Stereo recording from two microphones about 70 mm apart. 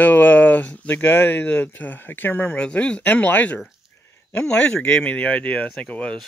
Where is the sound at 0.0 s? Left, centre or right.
Left.